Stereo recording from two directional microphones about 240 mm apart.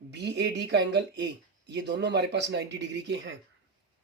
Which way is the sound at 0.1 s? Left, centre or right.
Right.